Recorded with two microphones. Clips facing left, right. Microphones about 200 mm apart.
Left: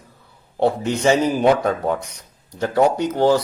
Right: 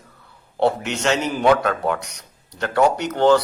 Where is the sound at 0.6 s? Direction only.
75° right (ahead or behind).